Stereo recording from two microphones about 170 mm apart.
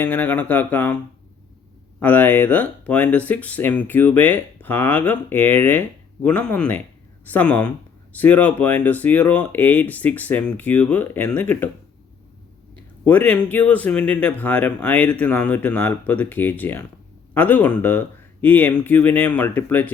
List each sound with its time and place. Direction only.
0.0 s speech: 10° left (ahead or behind)
2.0 s speech: 10° left (ahead or behind)
13.1 s speech: 10° left (ahead or behind)